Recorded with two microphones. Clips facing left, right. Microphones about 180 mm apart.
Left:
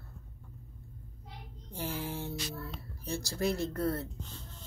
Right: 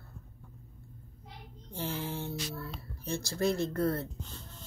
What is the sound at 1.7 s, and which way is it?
Speech, 10° left (ahead or behind).